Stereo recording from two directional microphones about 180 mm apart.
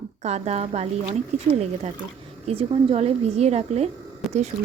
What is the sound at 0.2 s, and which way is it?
Speech, 40° right (ahead or behind).